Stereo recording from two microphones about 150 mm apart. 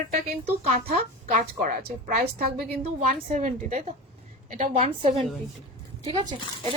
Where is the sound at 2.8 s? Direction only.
55° right (ahead or behind).